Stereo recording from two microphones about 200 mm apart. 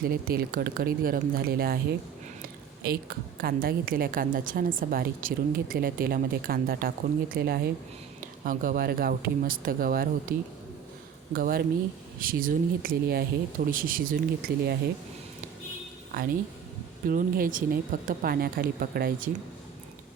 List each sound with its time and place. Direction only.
0.0 s a woman's voice: 45° right (ahead or behind)
2.8 s a woman's voice: 50° right (ahead or behind)
11.3 s a woman's voice: 45° right (ahead or behind)
17.1 s a woman's voice: 45° right (ahead or behind)